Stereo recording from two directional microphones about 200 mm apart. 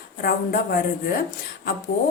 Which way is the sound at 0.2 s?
50° left (ahead or behind).